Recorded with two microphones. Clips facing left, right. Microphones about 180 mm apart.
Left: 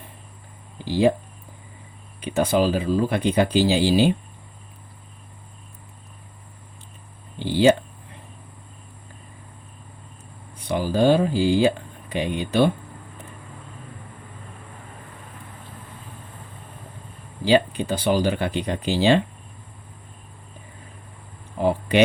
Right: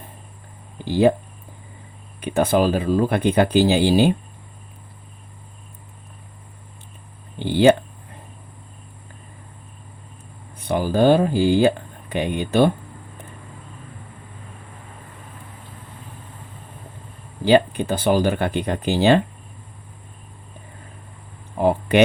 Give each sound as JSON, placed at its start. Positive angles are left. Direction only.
{"t": 0.9, "sound": "speech", "side_deg": -50}
{"t": 2.2, "sound": "speech", "side_deg": -50}
{"t": 7.3, "sound": "speech", "side_deg": -55}
{"t": 10.7, "sound": "speech", "side_deg": -50}
{"t": 17.4, "sound": "speech", "side_deg": -50}
{"t": 21.6, "sound": "a sound", "side_deg": -55}